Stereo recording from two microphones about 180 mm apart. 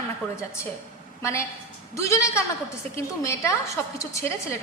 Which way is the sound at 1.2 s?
15° left (ahead or behind).